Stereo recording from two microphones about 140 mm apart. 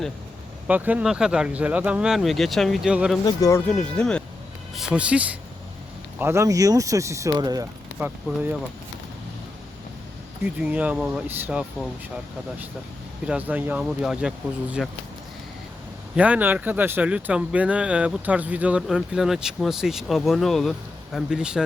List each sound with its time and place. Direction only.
0.7 s speech: 10° right (ahead or behind)
3.2 s speech: 25° left (ahead or behind)
3.7 s speech: 5° left (ahead or behind)
6.1 s speech: 20° right (ahead or behind)
7.9 s speech: 10° right (ahead or behind)
10.6 s speech: 10° right (ahead or behind)
13.2 s speech: 10° right (ahead or behind)
16.1 s speech: 10° right (ahead or behind)